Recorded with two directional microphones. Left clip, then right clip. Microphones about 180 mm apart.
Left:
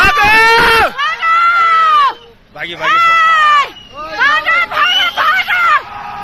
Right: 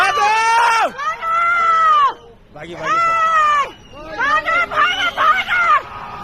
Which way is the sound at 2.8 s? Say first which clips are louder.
Left 6 dB; 35° left (ahead or behind).